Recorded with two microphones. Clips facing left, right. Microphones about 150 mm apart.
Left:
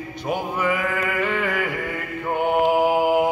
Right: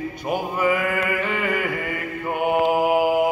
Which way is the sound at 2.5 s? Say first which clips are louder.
Left 1 dB; 5° right (ahead or behind).